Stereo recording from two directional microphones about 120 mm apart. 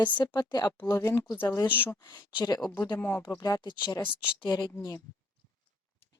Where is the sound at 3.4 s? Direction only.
35° left (ahead or behind).